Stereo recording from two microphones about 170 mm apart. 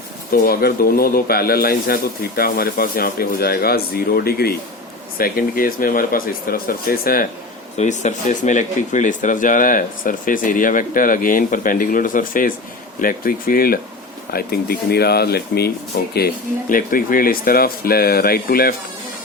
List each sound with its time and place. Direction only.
0.3 s a man's voice: 60° left (ahead or behind)
7.8 s a man's voice: 45° left (ahead or behind); by 18.8 s 60° left (ahead or behind)